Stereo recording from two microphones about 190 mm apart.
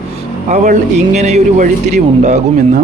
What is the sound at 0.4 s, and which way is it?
A man's voice, 40° right (ahead or behind).